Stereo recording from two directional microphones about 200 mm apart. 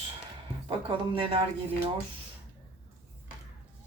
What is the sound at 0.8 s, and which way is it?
Speech, 25° right (ahead or behind).